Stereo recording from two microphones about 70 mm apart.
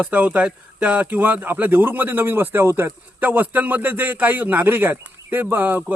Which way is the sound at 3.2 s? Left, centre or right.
Right.